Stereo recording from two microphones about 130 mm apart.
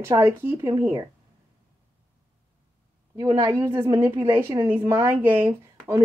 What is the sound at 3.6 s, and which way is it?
A woman's voice, 20° right (ahead or behind).